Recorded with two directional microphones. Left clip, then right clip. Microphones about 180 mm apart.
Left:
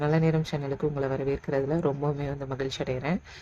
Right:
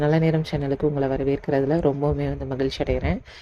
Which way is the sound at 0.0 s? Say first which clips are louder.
Right 5 dB; 15° right (ahead or behind).